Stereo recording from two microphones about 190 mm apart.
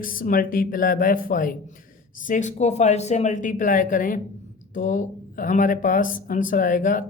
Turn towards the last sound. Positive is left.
turn(degrees=45)  # may be behind; listen again after turning